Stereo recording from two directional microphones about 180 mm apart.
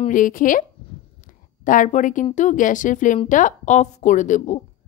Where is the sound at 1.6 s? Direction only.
45° left (ahead or behind).